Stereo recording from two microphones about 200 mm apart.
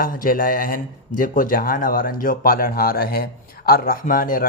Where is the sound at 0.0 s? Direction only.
45° left (ahead or behind).